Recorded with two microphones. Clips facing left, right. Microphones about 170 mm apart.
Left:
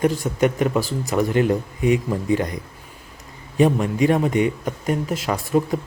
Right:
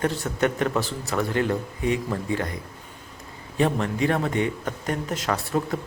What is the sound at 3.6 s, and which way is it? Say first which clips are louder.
Speech: left 5 dB; 15° left (ahead or behind).